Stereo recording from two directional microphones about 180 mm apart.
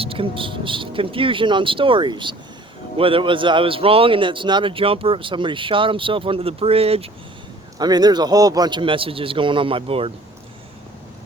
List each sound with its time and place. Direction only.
0.0 s a man's voice: 30° right (ahead or behind)
7.8 s a man's voice: 20° right (ahead or behind)